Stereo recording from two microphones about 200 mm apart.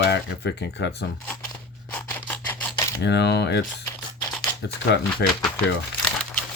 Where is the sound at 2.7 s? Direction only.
15° left (ahead or behind).